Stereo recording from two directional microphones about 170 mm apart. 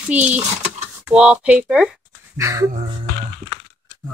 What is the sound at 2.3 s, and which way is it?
Speech, 20° right (ahead or behind).